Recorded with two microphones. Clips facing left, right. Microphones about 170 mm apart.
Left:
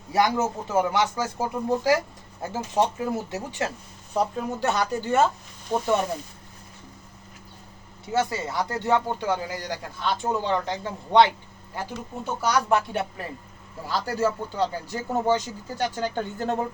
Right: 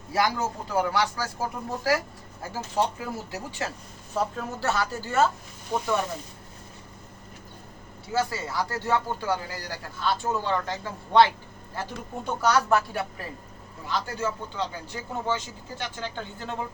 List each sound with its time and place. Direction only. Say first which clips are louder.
0.1 s speech: left 3 dB; 20° left (ahead or behind)
8.1 s speech: left 2 dB; 20° left (ahead or behind)
13.8 s speech: left 4 dB; 35° left (ahead or behind)